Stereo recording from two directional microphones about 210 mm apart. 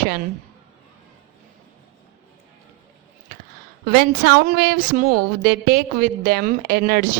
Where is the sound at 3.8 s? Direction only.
45° right (ahead or behind).